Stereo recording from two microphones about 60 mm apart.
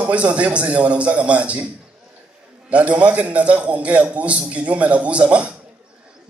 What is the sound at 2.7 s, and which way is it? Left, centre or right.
A man's voice, right.